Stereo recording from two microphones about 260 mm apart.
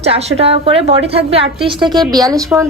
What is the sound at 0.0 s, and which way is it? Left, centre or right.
A woman's voice, right.